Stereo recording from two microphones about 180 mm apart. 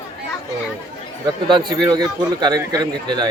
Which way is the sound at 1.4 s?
25° right (ahead or behind).